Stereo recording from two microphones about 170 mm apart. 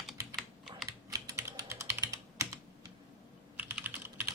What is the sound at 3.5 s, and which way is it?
Computer keyboard, 10° right (ahead or behind).